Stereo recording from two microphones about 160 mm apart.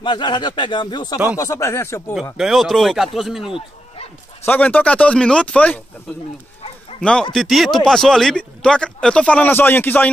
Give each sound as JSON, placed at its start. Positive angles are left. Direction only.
{"t": 0.0, "sound": "speech", "side_deg": 30}
{"t": 2.3, "sound": "speech", "side_deg": 0}
{"t": 3.5, "sound": "bow-wow", "side_deg": 40}
{"t": 4.5, "sound": "speech", "side_deg": 10}
{"t": 7.0, "sound": "a man's voice", "side_deg": 5}